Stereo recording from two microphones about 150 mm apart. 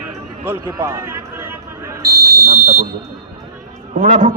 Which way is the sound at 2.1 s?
90° right.